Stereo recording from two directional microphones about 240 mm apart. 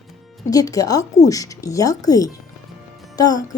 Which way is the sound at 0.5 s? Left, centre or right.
Centre.